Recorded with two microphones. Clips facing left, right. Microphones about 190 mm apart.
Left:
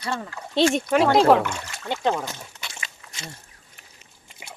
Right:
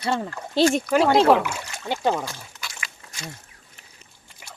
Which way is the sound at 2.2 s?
20° left (ahead or behind).